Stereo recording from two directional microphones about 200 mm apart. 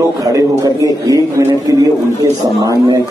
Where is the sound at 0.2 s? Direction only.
15° right (ahead or behind).